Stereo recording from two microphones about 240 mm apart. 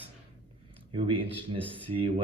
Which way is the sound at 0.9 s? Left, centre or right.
Right.